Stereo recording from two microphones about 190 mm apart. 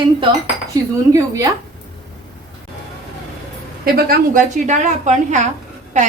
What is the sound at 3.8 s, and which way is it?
Speech, 55° right (ahead or behind).